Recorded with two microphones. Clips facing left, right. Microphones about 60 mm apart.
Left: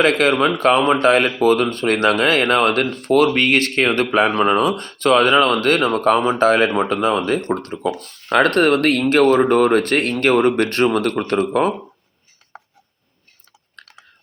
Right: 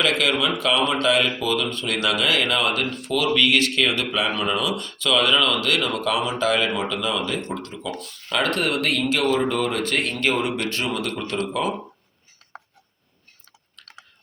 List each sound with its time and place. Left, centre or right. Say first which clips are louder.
0.0 s speech: left 6 dB; left